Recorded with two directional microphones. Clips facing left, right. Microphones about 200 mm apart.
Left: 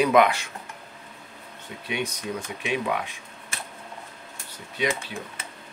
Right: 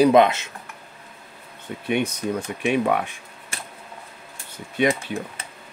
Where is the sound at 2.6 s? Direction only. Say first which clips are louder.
Right 6 dB; 55° right (ahead or behind).